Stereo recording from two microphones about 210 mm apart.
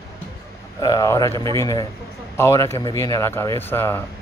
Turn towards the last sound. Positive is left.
turn(degrees=10)  # may be behind; listen again after turning